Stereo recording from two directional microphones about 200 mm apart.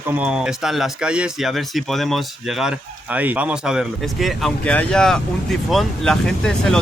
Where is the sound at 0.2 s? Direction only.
5° right (ahead or behind).